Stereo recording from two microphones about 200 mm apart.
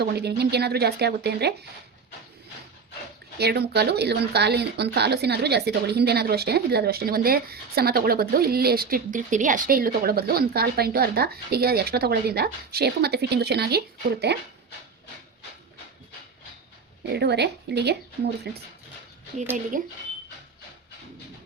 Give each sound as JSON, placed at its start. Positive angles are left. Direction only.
{"t": 0.0, "sound": "a woman's voice", "side_deg": -55}
{"t": 3.3, "sound": "speech", "side_deg": -55}
{"t": 17.1, "sound": "a woman's voice", "side_deg": -55}
{"t": 19.7, "sound": "speech", "side_deg": -40}